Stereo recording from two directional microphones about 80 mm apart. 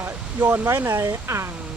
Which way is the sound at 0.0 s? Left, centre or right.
Right.